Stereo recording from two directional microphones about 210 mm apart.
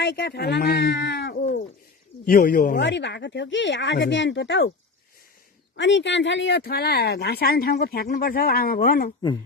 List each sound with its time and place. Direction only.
0.0 s speech: 55° left (ahead or behind)
2.7 s speech: 55° left (ahead or behind)
5.7 s speech: 60° left (ahead or behind); by 9.1 s 45° left (ahead or behind)